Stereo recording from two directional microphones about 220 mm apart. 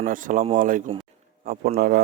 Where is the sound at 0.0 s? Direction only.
40° right (ahead or behind).